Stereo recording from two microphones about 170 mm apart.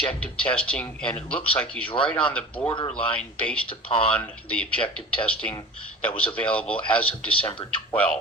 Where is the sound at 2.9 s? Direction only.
5° left (ahead or behind).